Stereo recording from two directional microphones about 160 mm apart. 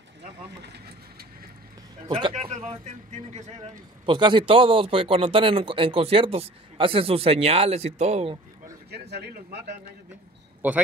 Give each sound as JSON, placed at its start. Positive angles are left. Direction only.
{"t": 2.0, "sound": "speech", "side_deg": -30}
{"t": 3.6, "sound": "speech", "side_deg": -30}
{"t": 8.9, "sound": "a man's voice", "side_deg": -90}
{"t": 10.6, "sound": "a man's voice", "side_deg": -10}